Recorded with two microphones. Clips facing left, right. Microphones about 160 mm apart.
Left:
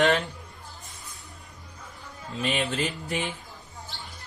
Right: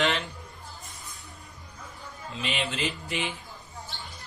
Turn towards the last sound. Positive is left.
turn(degrees=45)  # may be behind; listen again after turning